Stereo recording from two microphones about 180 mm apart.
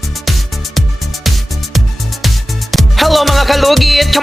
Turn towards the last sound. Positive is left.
turn(degrees=0)  # may be behind; listen again after turning